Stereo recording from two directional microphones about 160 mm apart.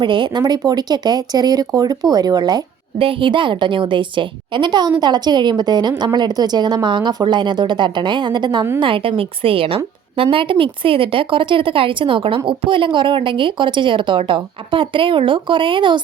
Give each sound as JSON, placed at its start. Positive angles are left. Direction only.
{"t": 0.0, "sound": "a woman's voice", "side_deg": -30}